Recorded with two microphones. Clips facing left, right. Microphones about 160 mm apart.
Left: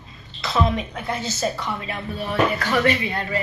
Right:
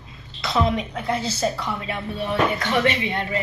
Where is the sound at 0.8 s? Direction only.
30° right (ahead or behind).